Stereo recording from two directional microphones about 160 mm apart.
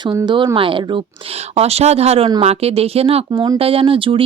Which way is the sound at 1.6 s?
40° right (ahead or behind).